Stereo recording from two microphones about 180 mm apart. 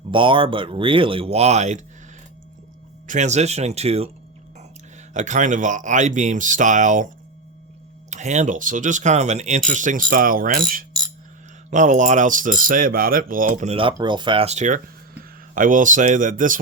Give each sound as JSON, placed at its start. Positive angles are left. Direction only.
{"t": 0.1, "sound": "speech", "side_deg": -30}
{"t": 3.1, "sound": "speech", "side_deg": -40}
{"t": 5.1, "sound": "speech", "side_deg": -45}
{"t": 8.1, "sound": "speech", "side_deg": -40}
{"t": 13.7, "sound": "speech", "side_deg": -25}